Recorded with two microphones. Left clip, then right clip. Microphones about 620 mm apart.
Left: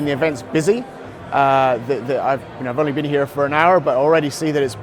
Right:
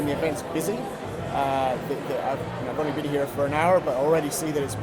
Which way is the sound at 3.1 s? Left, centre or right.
Left.